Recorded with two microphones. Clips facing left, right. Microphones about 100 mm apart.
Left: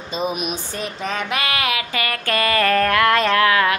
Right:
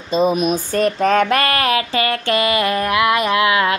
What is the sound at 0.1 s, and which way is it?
Speech, 35° right (ahead or behind).